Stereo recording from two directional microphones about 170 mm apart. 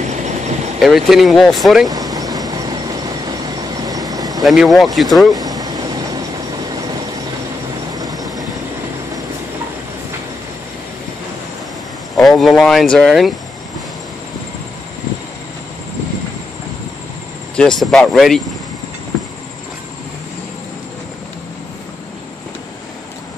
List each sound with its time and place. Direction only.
0.0 s vehicle: 45° right (ahead or behind)
0.7 s speech: centre (ahead or behind)
1.9 s vehicle: 20° right (ahead or behind)
4.4 s speech: centre (ahead or behind)
5.4 s vehicle: 20° right (ahead or behind)
7.9 s vehicle: 20° right (ahead or behind)
12.2 s speech: centre (ahead or behind)
17.6 s speech: 5° left (ahead or behind)